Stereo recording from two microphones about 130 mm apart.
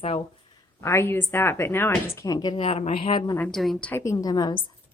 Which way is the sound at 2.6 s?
50° left (ahead or behind).